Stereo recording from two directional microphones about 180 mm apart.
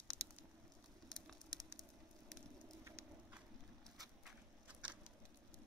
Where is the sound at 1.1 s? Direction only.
Centre (ahead or behind).